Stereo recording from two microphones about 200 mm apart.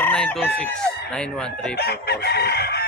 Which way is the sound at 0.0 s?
5° left (ahead or behind).